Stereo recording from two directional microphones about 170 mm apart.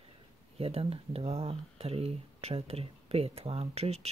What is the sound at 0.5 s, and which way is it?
Speech, 35° right (ahead or behind).